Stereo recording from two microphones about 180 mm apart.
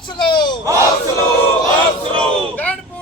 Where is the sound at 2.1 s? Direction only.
5° left (ahead or behind).